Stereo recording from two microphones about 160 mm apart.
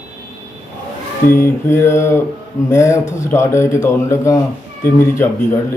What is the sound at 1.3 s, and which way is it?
A man's voice, 15° left (ahead or behind).